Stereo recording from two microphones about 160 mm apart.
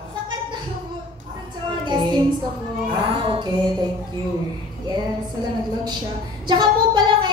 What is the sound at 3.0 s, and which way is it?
Music, 35° right (ahead or behind).